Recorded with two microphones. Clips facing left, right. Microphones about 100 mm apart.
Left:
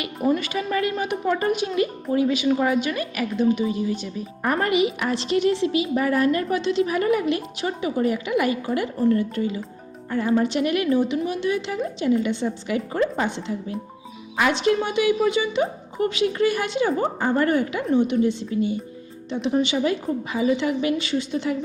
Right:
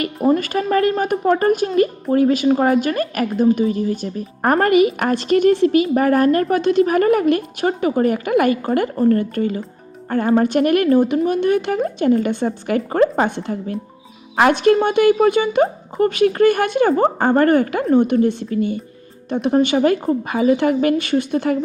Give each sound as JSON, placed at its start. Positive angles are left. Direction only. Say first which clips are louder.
{"t": 0.2, "sound": "a woman's voice", "louder": "right 5 dB", "side_deg": -40}